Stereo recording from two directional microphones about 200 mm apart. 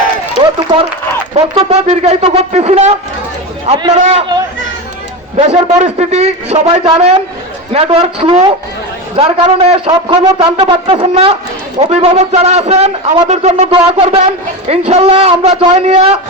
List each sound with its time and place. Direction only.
0.3 s run: 25° right (ahead or behind)
1.5 s a man's voice: 30° right (ahead or behind)
5.5 s a man's voice: 30° right (ahead or behind)